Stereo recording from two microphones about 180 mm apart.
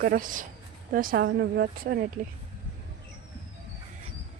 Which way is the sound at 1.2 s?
70° right (ahead or behind).